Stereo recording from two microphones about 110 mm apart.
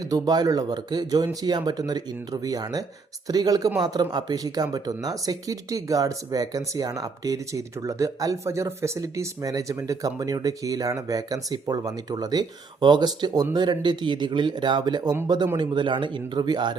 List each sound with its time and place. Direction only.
0.1 s speech: 35° right (ahead or behind)